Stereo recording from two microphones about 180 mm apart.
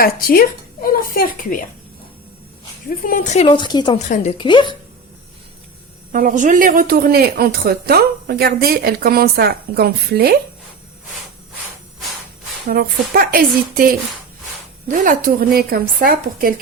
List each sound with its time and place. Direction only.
0.0 s speech: 55° left (ahead or behind)
3.0 s a woman's voice: 45° left (ahead or behind); by 3.9 s 25° left (ahead or behind)
3.9 s a woman's voice: 40° left (ahead or behind)
6.1 s speech: 50° right (ahead or behind)
12.6 s a woman's voice: 55° right (ahead or behind)